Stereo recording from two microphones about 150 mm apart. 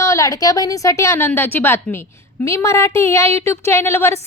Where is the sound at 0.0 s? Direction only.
20° left (ahead or behind).